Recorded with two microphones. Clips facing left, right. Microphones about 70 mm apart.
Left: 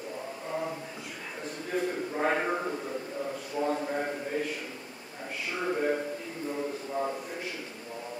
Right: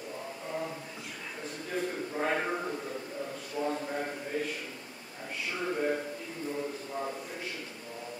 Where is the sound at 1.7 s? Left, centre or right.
Centre.